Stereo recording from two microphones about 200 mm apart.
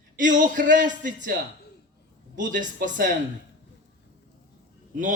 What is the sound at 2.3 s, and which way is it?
Speech, 40° right (ahead or behind).